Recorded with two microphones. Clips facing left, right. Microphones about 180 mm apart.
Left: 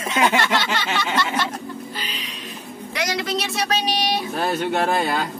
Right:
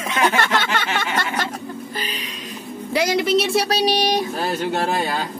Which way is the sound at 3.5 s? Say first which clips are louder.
Right 5 dB; 35° right (ahead or behind).